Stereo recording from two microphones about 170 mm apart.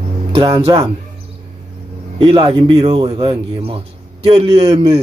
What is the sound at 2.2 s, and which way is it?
A man's voice, 25° right (ahead or behind).